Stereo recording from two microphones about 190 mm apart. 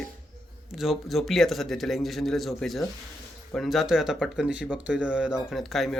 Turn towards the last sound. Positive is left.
turn(degrees=0)  # may be behind; listen again after turning